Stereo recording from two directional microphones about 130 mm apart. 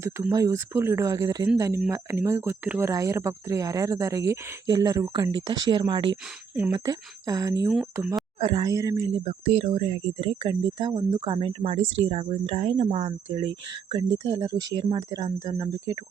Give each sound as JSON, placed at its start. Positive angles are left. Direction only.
{"t": 0.0, "sound": "speech", "side_deg": -25}
{"t": 8.4, "sound": "speech", "side_deg": -40}
{"t": 8.7, "sound": "speech", "side_deg": -25}
{"t": 9.0, "sound": "speech", "side_deg": -40}
{"t": 9.4, "sound": "speech", "side_deg": -55}
{"t": 9.6, "sound": "speech", "side_deg": -45}